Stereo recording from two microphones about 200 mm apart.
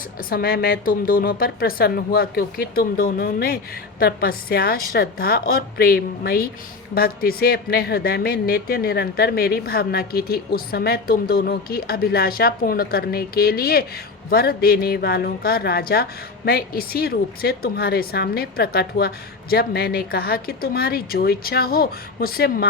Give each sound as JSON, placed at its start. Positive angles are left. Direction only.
{"t": 0.3, "sound": "speech", "side_deg": 50}